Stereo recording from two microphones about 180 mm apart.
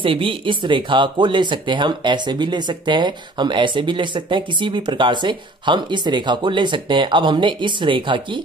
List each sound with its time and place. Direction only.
0.0 s speech: 30° right (ahead or behind)